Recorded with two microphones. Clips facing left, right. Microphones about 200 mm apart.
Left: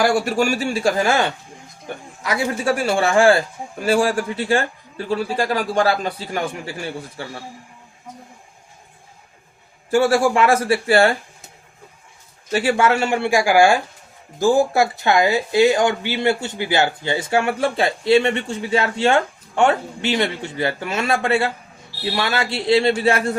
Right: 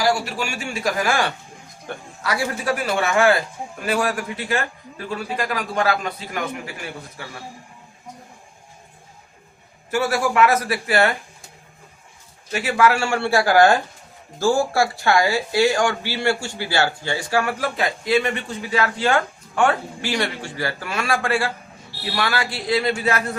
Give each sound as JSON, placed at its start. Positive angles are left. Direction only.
{"t": 0.0, "sound": "a man's voice", "side_deg": 50}
{"t": 9.9, "sound": "speech", "side_deg": 30}
{"t": 12.5, "sound": "a man's voice", "side_deg": 30}